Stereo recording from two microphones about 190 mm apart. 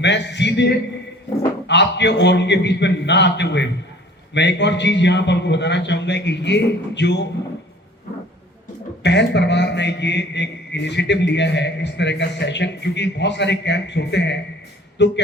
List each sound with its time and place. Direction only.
0.0 s a man's voice: 65° left (ahead or behind)
9.0 s a man's voice: 65° left (ahead or behind)